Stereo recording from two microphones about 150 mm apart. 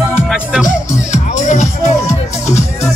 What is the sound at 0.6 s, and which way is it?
Music, 55° left (ahead or behind).